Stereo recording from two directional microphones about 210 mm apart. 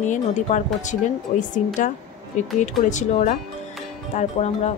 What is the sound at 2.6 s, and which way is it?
Speech, 35° left (ahead or behind).